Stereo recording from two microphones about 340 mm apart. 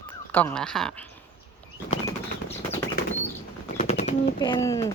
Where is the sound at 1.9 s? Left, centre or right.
Centre.